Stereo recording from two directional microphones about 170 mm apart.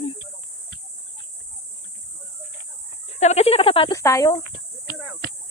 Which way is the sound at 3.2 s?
40° left (ahead or behind).